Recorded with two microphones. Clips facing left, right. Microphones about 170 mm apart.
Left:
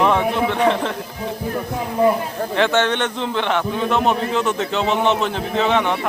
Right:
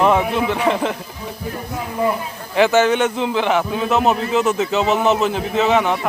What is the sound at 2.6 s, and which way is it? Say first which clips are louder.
A man's voice: right 4 dB; 5° right (ahead or behind).